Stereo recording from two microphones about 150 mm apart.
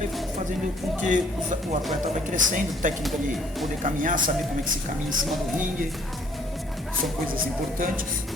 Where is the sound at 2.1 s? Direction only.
55° right (ahead or behind).